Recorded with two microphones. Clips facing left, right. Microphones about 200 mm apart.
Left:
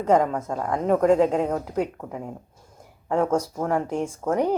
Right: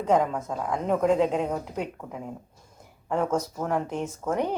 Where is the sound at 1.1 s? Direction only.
45° left (ahead or behind).